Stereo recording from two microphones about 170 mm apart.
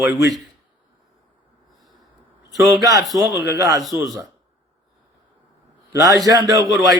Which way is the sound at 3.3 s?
20° right (ahead or behind).